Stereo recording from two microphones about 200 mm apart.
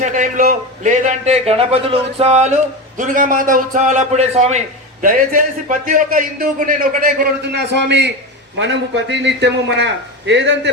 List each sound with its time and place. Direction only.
0.0 s a man's voice: 40° right (ahead or behind); by 10.7 s 60° right (ahead or behind)